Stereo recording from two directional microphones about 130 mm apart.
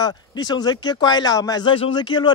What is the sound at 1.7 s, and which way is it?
Speech, 40° left (ahead or behind).